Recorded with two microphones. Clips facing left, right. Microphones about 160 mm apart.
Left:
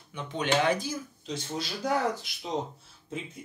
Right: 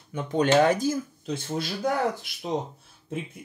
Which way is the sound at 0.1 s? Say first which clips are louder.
Right 7 dB; 45° right (ahead or behind).